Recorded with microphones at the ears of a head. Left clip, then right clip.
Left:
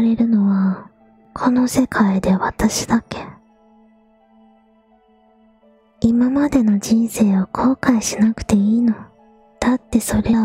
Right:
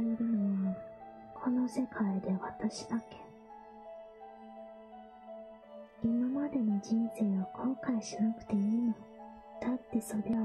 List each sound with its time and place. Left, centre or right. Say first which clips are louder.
0.0 s speech: left 17 dB; left
5.9 s speech: left 17 dB; left